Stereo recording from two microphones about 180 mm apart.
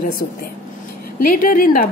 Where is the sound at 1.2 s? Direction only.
50° left (ahead or behind).